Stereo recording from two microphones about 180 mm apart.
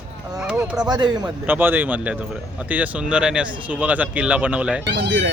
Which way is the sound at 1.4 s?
10° right (ahead or behind).